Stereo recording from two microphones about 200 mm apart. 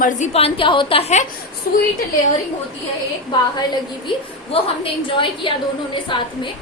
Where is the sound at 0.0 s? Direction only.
35° left (ahead or behind).